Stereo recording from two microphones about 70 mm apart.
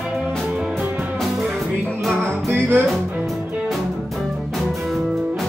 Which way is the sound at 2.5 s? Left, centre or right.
Right.